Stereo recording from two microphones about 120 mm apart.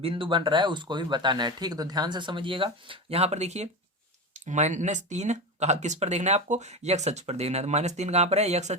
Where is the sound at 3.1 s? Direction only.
60° right (ahead or behind).